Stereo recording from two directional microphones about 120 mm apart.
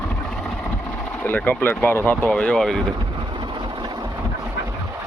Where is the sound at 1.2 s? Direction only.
15° left (ahead or behind).